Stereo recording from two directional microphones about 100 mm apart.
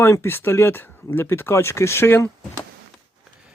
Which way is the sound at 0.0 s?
25° left (ahead or behind).